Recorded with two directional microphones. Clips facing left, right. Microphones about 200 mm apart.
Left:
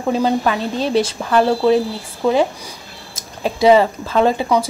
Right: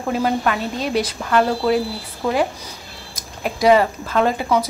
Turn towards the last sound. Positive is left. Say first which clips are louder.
# left 3 dB
turn(degrees=25)  # may be behind; listen again after turning